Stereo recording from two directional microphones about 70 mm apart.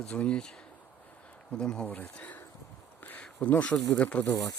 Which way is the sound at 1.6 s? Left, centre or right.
Centre.